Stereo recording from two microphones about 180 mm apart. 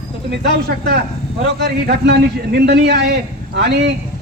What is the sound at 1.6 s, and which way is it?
A man's voice, 65° right (ahead or behind).